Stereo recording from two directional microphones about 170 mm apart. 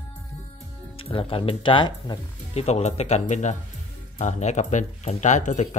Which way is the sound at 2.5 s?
40° left (ahead or behind).